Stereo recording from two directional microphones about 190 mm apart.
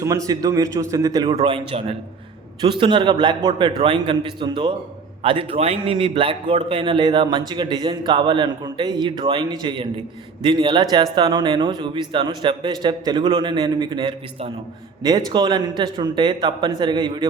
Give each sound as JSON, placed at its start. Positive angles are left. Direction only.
{"t": 0.0, "sound": "a man's voice", "side_deg": -15}
{"t": 1.3, "sound": "a man's voice", "side_deg": -30}